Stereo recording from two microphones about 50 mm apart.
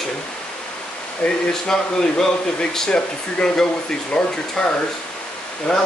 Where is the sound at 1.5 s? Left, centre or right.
Centre.